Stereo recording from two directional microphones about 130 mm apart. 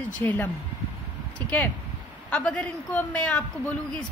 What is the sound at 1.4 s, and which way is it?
Speech, 40° right (ahead or behind).